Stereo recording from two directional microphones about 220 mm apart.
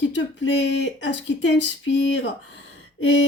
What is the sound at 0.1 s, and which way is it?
Speech, 55° left (ahead or behind).